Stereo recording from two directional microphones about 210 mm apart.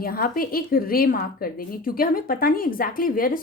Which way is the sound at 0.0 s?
45° left (ahead or behind).